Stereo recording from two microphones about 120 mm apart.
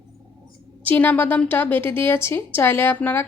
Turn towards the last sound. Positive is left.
turn(degrees=15)  # may be behind; listen again after turning